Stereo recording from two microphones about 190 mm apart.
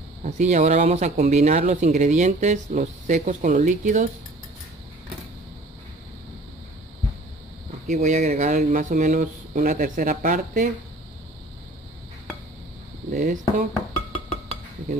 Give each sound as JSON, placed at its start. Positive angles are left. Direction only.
{"t": 0.2, "sound": "speech", "side_deg": -40}
{"t": 7.9, "sound": "speech", "side_deg": -40}
{"t": 13.1, "sound": "speech", "side_deg": -50}